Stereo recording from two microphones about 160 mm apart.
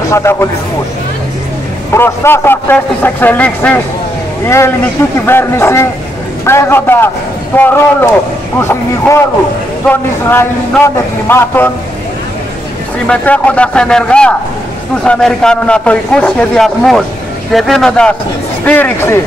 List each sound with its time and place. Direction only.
0.1 s a man's voice: 15° left (ahead or behind)
2.0 s a man's voice: 15° left (ahead or behind)
11.2 s a man's voice: 15° left (ahead or behind)
13.0 s a man's voice: 5° left (ahead or behind)